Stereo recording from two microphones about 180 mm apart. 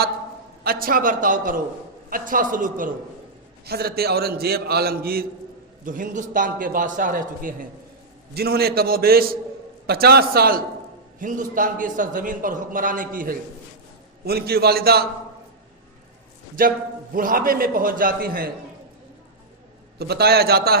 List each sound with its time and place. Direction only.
0.6 s a man's voice: 55° right (ahead or behind)
3.7 s a man's voice: 60° right (ahead or behind)
5.8 s a man's voice: 45° right (ahead or behind)
8.4 s a man's voice: 60° right (ahead or behind)
16.6 s a man's voice: 50° right (ahead or behind)
20.0 s a man's voice: 60° right (ahead or behind)